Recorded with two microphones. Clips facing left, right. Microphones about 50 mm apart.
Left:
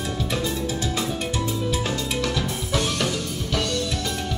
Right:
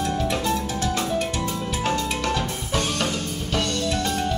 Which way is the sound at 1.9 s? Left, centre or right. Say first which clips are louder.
Right 2 dB; right.